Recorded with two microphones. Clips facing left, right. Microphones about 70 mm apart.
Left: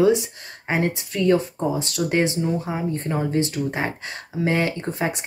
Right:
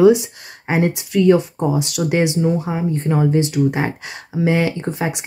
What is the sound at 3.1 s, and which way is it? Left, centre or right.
Speech, centre.